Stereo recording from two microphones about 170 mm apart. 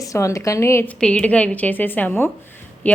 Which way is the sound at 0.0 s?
20° left (ahead or behind).